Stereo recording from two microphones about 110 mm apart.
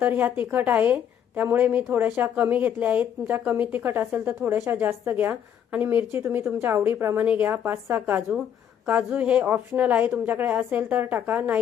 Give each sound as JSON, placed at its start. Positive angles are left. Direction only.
{"t": 0.0, "sound": "a woman's voice", "side_deg": -20}